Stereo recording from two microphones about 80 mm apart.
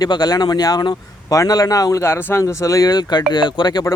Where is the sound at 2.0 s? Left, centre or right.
Left.